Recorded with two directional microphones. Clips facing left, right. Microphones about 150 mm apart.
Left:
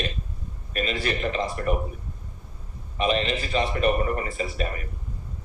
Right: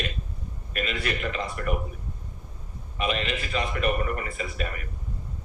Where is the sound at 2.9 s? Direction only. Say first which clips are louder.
Left 4 dB; 30° left (ahead or behind).